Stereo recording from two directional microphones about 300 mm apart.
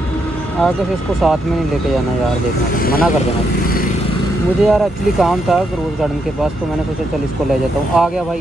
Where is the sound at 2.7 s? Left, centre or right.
Left.